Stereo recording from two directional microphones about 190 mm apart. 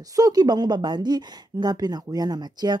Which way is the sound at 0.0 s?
20° right (ahead or behind).